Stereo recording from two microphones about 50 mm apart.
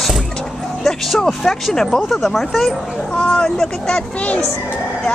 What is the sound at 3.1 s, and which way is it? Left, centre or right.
Speech, centre.